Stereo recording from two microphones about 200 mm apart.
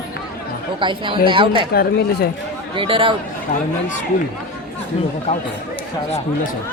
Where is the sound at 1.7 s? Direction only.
50° left (ahead or behind).